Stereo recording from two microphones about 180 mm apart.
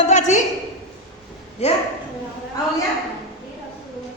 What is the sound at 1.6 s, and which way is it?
Speech, 35° left (ahead or behind).